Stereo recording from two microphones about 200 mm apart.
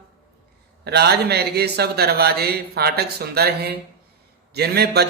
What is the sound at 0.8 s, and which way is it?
Mantra, 55° right (ahead or behind).